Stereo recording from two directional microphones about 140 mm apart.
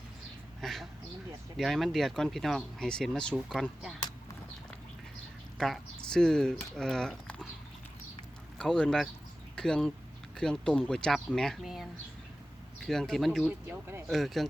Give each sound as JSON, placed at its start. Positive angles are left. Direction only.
{"t": 0.6, "sound": "a sound", "side_deg": 0}
{"t": 1.5, "sound": "speech", "side_deg": 0}
{"t": 5.5, "sound": "speech", "side_deg": 0}
{"t": 8.5, "sound": "speech", "side_deg": 5}
{"t": 13.7, "sound": "speech", "side_deg": -15}
{"t": 14.1, "sound": "speech", "side_deg": 0}